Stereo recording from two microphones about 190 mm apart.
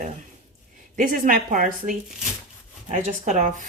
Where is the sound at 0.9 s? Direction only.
45° right (ahead or behind).